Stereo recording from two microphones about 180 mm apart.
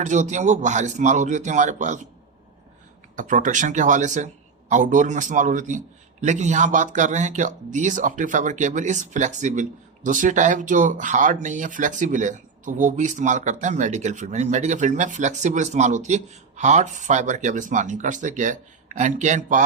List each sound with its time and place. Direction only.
0.0 s speech: 40° right (ahead or behind)
3.2 s speech: 45° right (ahead or behind)